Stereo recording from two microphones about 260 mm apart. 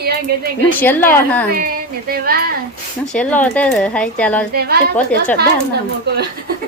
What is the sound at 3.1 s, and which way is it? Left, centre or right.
Speech, centre.